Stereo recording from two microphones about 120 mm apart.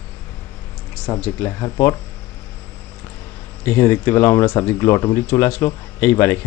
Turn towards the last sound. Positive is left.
turn(degrees=20)  # may be behind; listen again after turning